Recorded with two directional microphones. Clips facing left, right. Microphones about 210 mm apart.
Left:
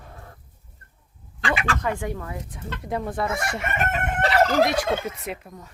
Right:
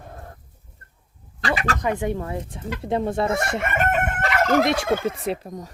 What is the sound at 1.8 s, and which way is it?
Speech, 20° right (ahead or behind).